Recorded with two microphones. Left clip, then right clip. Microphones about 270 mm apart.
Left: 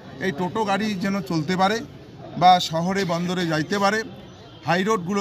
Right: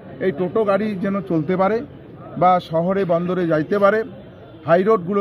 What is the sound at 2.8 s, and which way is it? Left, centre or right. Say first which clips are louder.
A man's voice: right 6 dB; centre.